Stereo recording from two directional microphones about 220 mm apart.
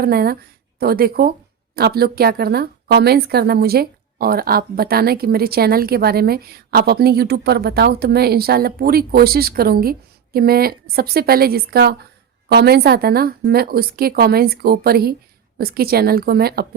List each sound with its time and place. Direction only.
0.0 s a woman's voice: 45° right (ahead or behind)